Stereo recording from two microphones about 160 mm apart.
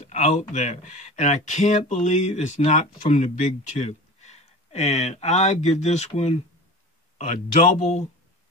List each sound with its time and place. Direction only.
0.0 s speech: 45° left (ahead or behind)